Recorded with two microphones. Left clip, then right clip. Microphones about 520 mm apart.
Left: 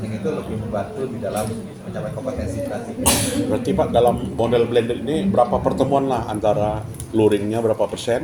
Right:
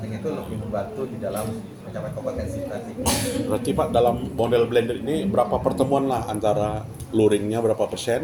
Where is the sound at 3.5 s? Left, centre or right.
Right.